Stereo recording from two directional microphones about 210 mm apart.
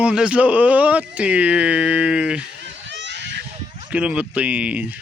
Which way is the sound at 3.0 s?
55° right (ahead or behind).